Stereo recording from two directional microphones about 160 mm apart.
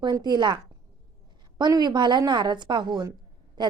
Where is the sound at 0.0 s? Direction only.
25° right (ahead or behind).